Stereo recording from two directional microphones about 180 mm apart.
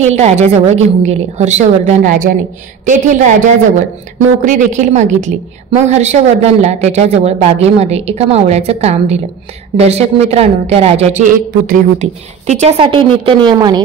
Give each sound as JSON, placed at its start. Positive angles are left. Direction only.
{"t": 0.0, "sound": "a woman's voice", "side_deg": -40}
{"t": 4.5, "sound": "a woman's voice", "side_deg": -45}